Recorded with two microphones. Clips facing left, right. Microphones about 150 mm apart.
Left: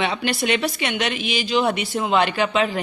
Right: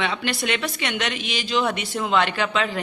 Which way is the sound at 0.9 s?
10° left (ahead or behind).